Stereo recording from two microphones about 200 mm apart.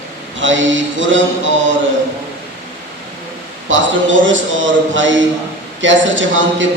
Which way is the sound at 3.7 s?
70° right (ahead or behind).